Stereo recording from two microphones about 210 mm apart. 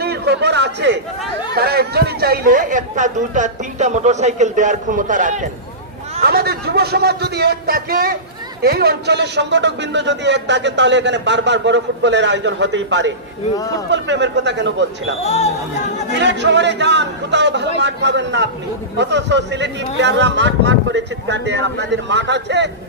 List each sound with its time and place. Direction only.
0.0 s a sound: 50° right (ahead or behind)
1.5 s speech: 50° right (ahead or behind)
6.2 s a man's voice: 50° right (ahead or behind)
15.2 s speech: 30° left (ahead or behind)
16.2 s a man's voice: 55° right (ahead or behind)